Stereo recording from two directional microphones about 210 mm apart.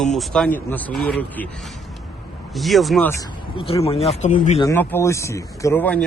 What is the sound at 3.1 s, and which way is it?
Speech, 20° left (ahead or behind).